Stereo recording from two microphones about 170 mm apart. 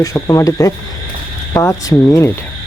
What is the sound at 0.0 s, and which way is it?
Speech, 20° left (ahead or behind).